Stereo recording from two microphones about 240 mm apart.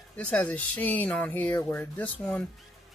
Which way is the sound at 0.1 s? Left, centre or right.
Centre.